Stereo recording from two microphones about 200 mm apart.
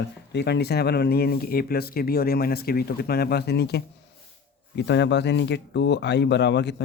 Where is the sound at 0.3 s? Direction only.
55° left (ahead or behind).